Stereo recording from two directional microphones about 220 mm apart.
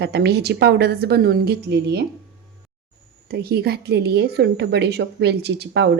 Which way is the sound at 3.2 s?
45° right (ahead or behind).